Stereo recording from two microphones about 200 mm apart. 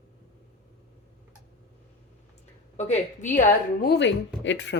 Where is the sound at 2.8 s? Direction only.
35° left (ahead or behind); by 4.7 s 65° left (ahead or behind).